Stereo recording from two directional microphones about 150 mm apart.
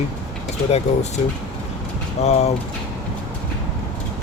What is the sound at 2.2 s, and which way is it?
Speech, 45° left (ahead or behind).